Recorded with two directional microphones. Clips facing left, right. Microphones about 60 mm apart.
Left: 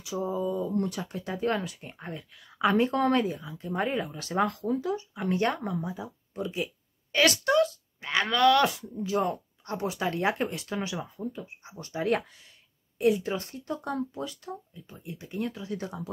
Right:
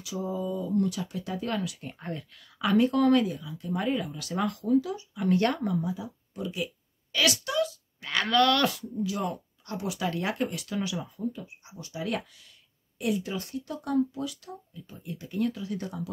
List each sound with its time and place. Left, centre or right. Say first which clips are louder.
0.0 s speech: left 2 dB; left
1.8 s speech: right 3 dB; centre
2.6 s speech: right 1 dB; left
3.7 s speech: even; left
5.5 s speech: right 2 dB; centre
5.8 s speech: right 2 dB; left
8.0 s speech: left 1 dB; centre
9.0 s speech: left 4 dB; left
14.9 s speech: right 1 dB; left